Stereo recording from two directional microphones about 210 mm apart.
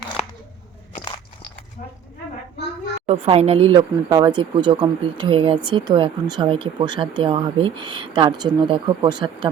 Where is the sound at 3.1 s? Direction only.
30° right (ahead or behind).